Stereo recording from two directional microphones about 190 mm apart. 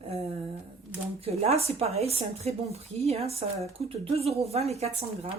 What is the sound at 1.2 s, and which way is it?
Speech, 35° right (ahead or behind).